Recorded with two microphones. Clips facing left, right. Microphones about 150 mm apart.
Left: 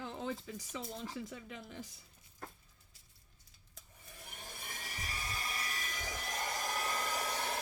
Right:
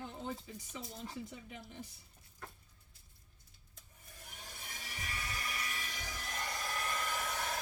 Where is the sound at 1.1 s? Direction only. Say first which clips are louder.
Left 2 dB; 90° left.